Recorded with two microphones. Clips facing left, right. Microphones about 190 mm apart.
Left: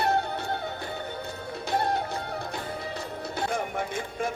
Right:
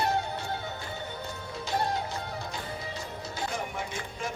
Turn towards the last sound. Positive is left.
turn(degrees=55)  # may be behind; listen again after turning